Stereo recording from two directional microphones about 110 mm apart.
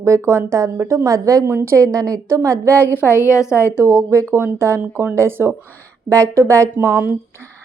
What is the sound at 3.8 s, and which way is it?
A woman's voice, 25° right (ahead or behind).